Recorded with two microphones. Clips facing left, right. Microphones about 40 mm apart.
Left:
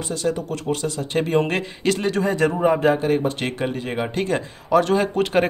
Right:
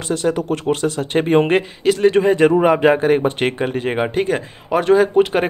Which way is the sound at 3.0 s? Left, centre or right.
Right.